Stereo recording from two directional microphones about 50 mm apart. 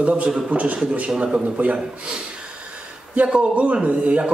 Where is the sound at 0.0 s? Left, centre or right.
Right.